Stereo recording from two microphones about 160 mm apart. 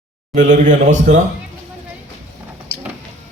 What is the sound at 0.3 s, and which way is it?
Speech, 50° right (ahead or behind).